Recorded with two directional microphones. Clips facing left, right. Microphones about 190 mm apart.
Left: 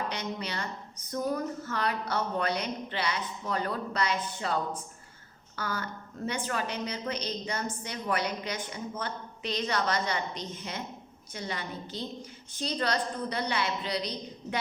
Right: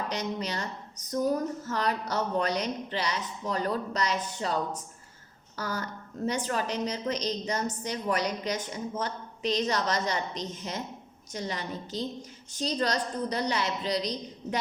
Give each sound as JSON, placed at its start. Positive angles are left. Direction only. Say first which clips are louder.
{"t": 0.1, "sound": "a woman's voice", "louder": "right 3 dB", "side_deg": -40}
{"t": 5.5, "sound": "a woman's voice", "louder": "right 1 dB", "side_deg": -40}